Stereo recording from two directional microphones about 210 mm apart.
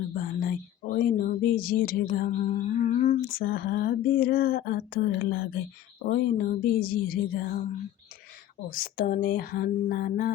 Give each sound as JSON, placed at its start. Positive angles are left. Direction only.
{"t": 0.1, "sound": "speech", "side_deg": 45}
{"t": 8.7, "sound": "speech", "side_deg": 40}